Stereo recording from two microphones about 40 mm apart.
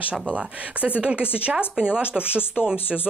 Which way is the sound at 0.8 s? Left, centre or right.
Right.